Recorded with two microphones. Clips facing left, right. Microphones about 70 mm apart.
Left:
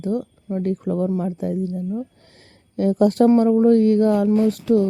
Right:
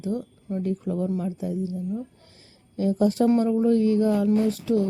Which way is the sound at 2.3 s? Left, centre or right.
Left.